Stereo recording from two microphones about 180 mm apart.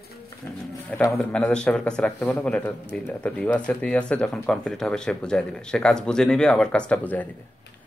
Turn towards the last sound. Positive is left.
turn(degrees=10)  # may be behind; listen again after turning